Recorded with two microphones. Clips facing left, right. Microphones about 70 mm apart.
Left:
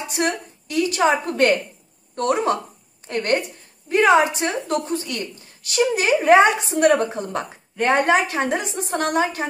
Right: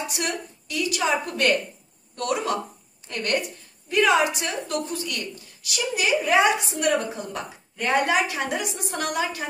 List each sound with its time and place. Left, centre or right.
0.1 s a woman's voice: left